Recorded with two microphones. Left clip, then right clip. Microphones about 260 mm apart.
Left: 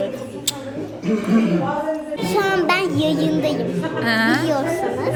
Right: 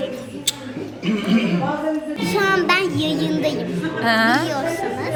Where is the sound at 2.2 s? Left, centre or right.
Centre.